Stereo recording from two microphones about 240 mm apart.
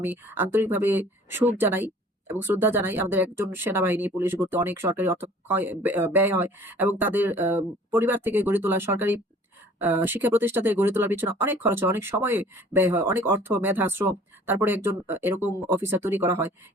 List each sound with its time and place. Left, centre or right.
0.0 s speech: centre